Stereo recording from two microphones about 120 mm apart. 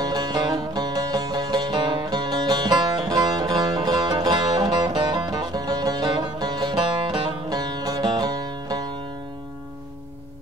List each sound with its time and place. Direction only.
0.0 s music: 35° right (ahead or behind)